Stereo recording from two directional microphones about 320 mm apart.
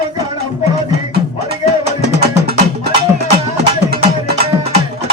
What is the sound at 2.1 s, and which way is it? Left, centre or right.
Music, right.